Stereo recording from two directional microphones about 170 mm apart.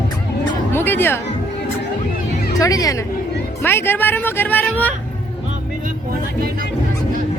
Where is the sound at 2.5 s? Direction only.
20° left (ahead or behind).